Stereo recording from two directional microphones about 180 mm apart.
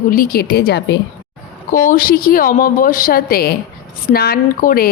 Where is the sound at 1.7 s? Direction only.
50° left (ahead or behind).